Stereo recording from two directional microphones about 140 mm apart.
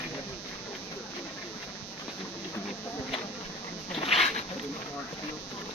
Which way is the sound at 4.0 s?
50° left (ahead or behind).